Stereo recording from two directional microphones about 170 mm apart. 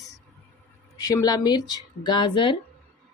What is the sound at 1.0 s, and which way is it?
Speech, 20° left (ahead or behind).